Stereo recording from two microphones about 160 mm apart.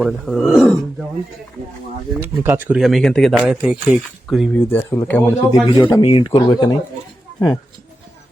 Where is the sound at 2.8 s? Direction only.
Centre (ahead or behind).